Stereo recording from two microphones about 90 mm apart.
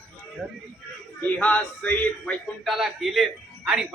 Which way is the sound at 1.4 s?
15° left (ahead or behind).